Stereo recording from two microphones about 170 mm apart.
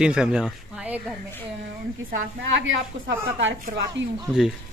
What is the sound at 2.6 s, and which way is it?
A woman's voice, 90° right.